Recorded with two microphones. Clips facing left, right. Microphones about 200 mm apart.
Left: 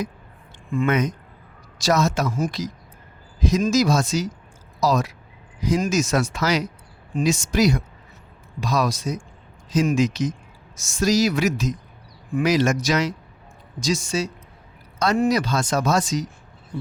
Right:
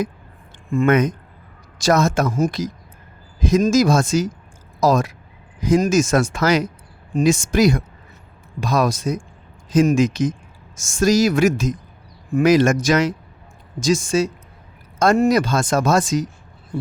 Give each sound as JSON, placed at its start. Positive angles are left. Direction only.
{"t": 0.7, "sound": "speech", "side_deg": -50}